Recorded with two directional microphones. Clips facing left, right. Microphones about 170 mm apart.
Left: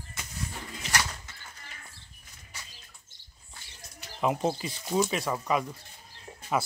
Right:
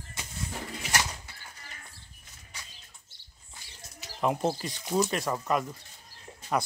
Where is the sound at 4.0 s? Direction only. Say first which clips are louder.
Even; centre (ahead or behind).